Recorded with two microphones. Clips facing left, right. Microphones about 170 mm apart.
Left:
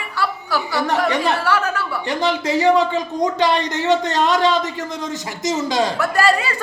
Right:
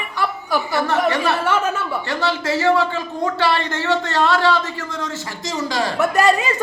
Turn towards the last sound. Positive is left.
turn(degrees=-20)  # may be behind; listen again after turning